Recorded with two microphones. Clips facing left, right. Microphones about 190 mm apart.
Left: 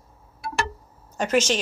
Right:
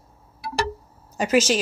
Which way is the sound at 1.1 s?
5° right (ahead or behind).